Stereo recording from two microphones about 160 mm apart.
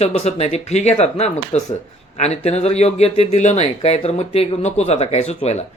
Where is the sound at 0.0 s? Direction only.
40° left (ahead or behind).